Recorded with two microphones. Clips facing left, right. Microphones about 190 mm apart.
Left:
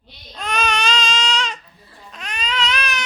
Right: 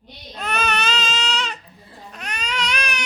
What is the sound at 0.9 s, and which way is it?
Baby cry, 5° right (ahead or behind).